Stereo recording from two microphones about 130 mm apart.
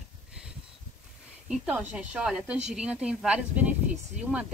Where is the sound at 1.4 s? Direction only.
5° right (ahead or behind).